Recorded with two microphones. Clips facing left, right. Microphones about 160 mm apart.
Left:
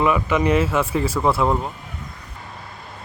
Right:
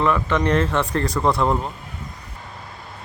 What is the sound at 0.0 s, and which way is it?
Speech, 10° left (ahead or behind).